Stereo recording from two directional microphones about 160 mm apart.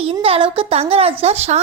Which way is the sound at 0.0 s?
35° right (ahead or behind).